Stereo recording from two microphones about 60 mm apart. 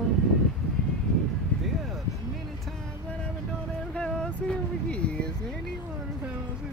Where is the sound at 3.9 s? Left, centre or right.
Centre.